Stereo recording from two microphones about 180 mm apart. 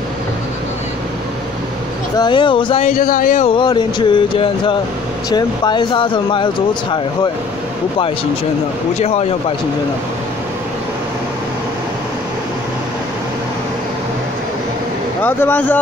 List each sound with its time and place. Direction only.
2.1 s speech: 25° left (ahead or behind)
2.9 s speech: 50° left (ahead or behind)
3.4 s speech: 25° left (ahead or behind)
8.9 s a man's voice: 35° left (ahead or behind)
15.2 s speech: 10° left (ahead or behind)